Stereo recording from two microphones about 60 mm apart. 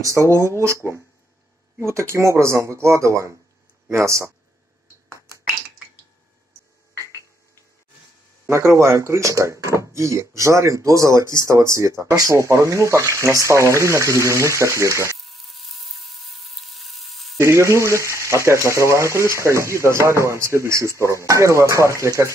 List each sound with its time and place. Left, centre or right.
0.0 s speech: right
1.8 s speech: right
8.5 s speech: right
15.1 s electric toothbrush: centre
17.4 s speech: right